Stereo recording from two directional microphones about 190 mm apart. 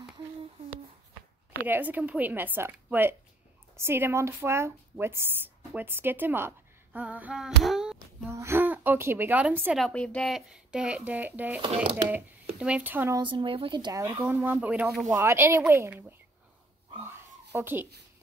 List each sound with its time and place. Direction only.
1.7 s a woman's voice: 10° right (ahead or behind)
9.8 s speech: 5° left (ahead or behind)
13.2 s speech: 25° right (ahead or behind)
17.0 s a sound: 15° right (ahead or behind)